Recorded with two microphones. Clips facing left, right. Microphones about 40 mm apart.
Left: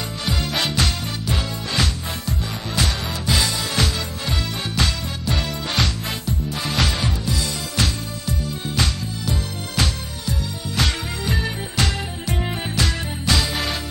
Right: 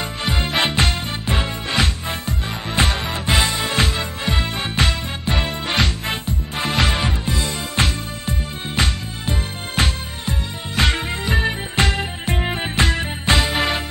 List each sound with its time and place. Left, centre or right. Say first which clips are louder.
0.2 s music: right 3 dB; right